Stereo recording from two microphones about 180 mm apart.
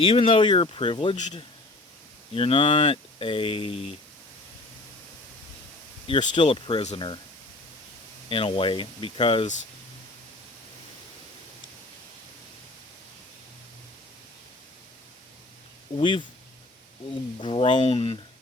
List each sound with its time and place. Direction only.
0.0 s speech: 30° left (ahead or behind)
2.3 s speech: 30° left (ahead or behind)
6.1 s speech: 25° left (ahead or behind)
8.3 s speech: 30° left (ahead or behind)
16.0 s speech: 30° left (ahead or behind)
17.4 s speech: 30° left (ahead or behind)